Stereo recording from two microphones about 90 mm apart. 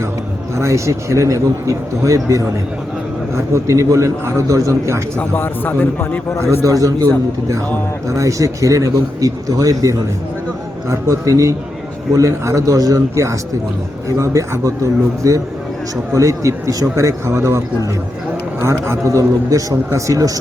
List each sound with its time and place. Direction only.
0.5 s a man's voice: 35° right (ahead or behind)
5.1 s speech: 20° left (ahead or behind)
6.7 s a man's voice: 40° right (ahead or behind)
18.6 s a man's voice: 30° right (ahead or behind)